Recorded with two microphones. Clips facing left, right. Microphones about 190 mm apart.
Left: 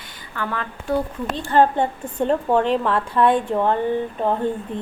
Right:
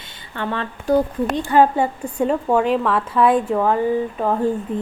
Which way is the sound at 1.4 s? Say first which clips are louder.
Right 1 dB; 10° right (ahead or behind).